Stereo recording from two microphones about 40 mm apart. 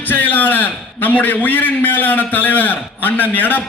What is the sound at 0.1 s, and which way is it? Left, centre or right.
A man's voice, left.